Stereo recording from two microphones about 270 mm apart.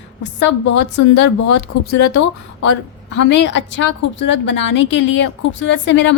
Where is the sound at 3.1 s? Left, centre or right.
Left.